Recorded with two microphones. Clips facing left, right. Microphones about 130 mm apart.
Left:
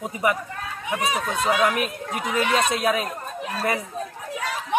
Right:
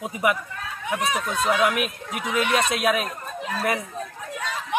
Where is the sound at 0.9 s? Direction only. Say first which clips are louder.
Even; 5° left (ahead or behind).